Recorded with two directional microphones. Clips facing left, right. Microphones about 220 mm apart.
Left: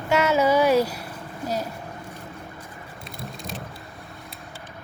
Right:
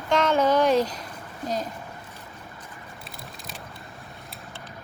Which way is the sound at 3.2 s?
Centre (ahead or behind).